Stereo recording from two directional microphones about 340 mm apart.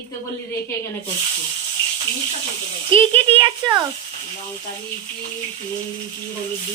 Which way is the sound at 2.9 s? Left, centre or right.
Centre.